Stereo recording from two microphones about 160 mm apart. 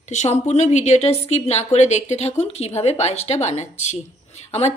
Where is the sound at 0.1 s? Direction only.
45° left (ahead or behind).